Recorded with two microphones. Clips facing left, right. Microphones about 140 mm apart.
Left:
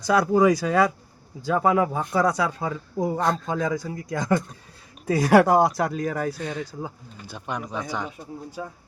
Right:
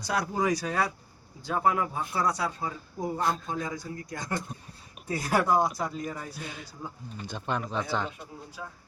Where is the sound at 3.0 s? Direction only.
90° left.